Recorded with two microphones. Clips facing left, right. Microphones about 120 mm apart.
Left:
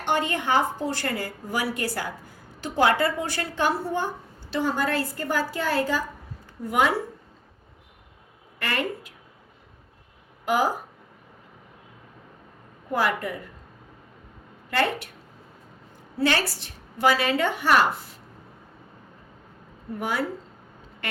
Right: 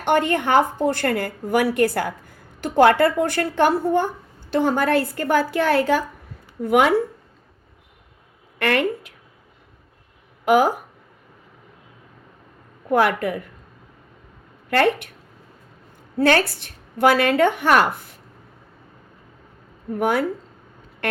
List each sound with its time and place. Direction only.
0.0 s a woman's voice: 55° right (ahead or behind)
8.5 s speech: 65° right (ahead or behind)
10.4 s a woman's voice: 65° right (ahead or behind)
12.9 s a woman's voice: 60° right (ahead or behind)
14.7 s a woman's voice: 60° right (ahead or behind)
16.1 s a woman's voice: 55° right (ahead or behind)
19.9 s a woman's voice: 55° right (ahead or behind)